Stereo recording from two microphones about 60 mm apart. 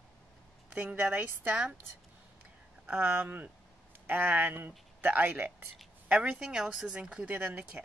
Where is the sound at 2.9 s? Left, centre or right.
Right.